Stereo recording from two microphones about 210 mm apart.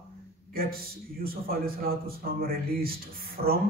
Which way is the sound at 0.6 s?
45° right (ahead or behind).